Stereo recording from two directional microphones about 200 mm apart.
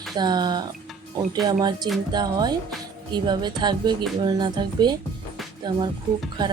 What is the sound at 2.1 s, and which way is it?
Speech, 20° right (ahead or behind).